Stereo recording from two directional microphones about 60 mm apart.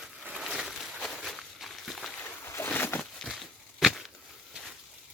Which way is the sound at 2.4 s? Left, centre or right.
Left.